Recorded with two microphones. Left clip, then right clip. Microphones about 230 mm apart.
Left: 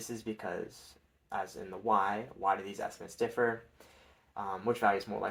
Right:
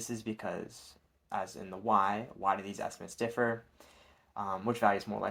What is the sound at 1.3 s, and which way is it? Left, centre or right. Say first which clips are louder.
Speech: even; right.